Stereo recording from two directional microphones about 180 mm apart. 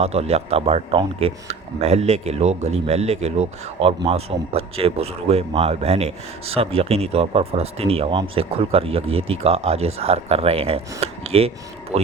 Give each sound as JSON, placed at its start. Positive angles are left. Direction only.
{"t": 0.0, "sound": "speech", "side_deg": -35}